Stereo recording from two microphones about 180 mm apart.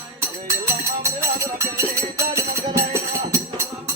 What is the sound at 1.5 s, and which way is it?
Music, 15° right (ahead or behind).